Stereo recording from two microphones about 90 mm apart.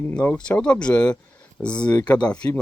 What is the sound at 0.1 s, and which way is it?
Speech, 15° left (ahead or behind).